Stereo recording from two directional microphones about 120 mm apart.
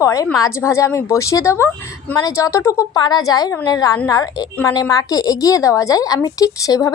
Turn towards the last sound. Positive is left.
turn(degrees=30)  # may be behind; listen again after turning